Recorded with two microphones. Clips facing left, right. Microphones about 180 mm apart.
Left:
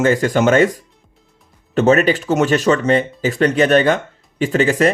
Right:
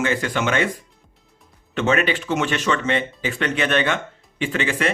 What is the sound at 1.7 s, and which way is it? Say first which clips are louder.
Speech: left 7 dB; 40° left (ahead or behind).